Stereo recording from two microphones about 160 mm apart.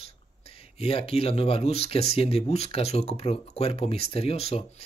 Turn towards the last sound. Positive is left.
turn(degrees=40)  # may be behind; listen again after turning